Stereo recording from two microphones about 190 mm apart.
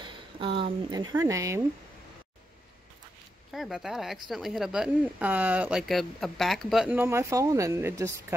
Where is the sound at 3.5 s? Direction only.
Centre (ahead or behind).